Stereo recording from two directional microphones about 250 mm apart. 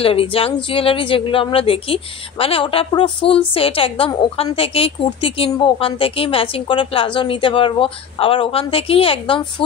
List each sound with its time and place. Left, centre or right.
0.0 s a woman's voice: left